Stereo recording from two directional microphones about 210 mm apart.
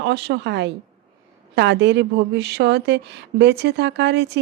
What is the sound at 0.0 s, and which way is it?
A woman's voice, 55° right (ahead or behind).